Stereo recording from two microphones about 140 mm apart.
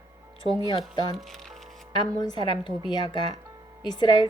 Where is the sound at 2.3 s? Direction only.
30° left (ahead or behind).